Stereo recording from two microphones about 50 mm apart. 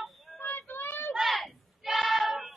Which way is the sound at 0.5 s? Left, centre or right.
Left.